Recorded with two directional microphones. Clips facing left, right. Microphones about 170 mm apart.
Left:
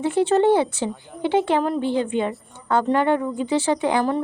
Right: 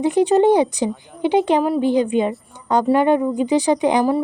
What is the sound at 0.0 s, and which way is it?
Speech, 15° right (ahead or behind).